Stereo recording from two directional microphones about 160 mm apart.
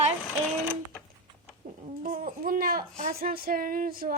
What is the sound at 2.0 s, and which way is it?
Speech, 60° right (ahead or behind).